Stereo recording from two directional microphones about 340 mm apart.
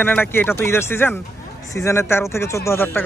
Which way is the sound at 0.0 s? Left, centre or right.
Centre.